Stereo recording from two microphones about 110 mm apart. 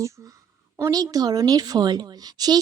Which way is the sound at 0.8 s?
35° right (ahead or behind).